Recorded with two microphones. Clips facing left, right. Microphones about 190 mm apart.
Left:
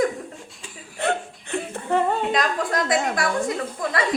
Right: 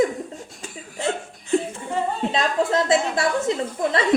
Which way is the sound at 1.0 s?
60° left (ahead or behind).